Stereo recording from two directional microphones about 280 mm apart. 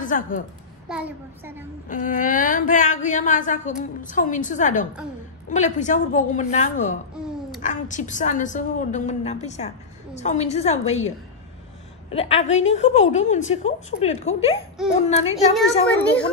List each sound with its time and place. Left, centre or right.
0.0 s a woman's voice: left
0.8 s a child's voice: centre
1.9 s a woman's voice: left
12.1 s a woman's voice: left